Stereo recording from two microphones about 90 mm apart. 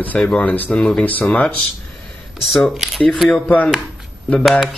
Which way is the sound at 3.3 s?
15° left (ahead or behind).